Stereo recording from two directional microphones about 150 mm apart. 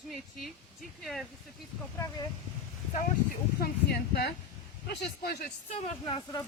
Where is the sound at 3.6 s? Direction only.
90° left.